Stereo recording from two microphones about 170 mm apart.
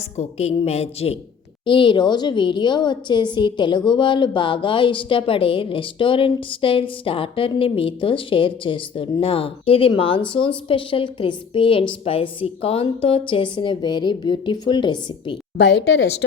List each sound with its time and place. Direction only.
0.2 s a woman's voice: 40° left (ahead or behind)
15.5 s speech: 90° left